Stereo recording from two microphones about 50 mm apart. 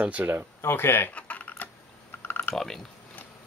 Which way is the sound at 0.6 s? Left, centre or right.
Left.